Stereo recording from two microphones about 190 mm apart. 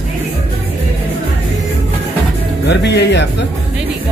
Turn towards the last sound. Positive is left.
turn(degrees=65)  # may be behind; listen again after turning